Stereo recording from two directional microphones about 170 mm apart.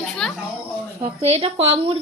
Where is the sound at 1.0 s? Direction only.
35° right (ahead or behind).